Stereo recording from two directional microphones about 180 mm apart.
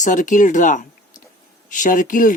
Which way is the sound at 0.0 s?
45° left (ahead or behind).